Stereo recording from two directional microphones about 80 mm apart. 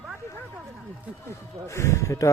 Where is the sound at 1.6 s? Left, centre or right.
Left.